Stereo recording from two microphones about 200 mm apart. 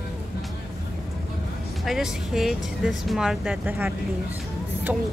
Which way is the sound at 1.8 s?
Centre (ahead or behind).